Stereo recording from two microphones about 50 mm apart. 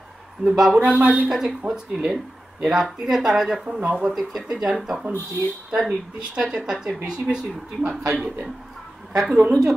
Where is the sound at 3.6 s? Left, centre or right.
Right.